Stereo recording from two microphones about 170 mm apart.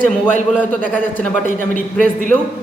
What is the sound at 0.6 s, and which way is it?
Speech, 10° left (ahead or behind).